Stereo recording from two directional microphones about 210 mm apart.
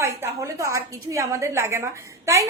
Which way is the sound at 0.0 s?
15° right (ahead or behind).